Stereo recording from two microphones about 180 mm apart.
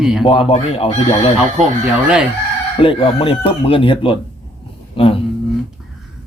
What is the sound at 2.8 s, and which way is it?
Speech, 30° left (ahead or behind).